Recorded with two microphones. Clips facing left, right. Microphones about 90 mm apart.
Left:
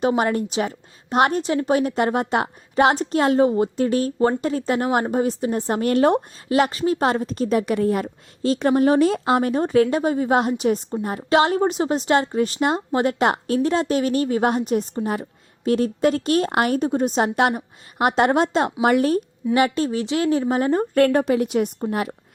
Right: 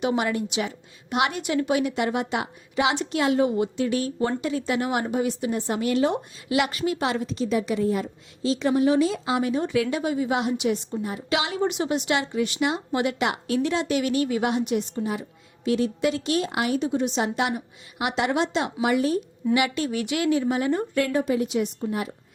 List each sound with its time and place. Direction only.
0.0 s a woman's voice: 40° left (ahead or behind)
6.6 s a woman's voice: 35° left (ahead or behind); by 19.2 s 55° left (ahead or behind)
19.5 s a woman's voice: 40° left (ahead or behind); by 22.1 s 60° left (ahead or behind)